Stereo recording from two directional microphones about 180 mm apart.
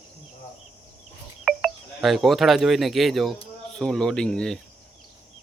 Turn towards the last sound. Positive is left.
turn(degrees=5)  # may be behind; listen again after turning